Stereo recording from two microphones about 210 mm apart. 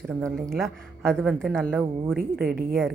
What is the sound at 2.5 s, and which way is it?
Speech, 45° right (ahead or behind).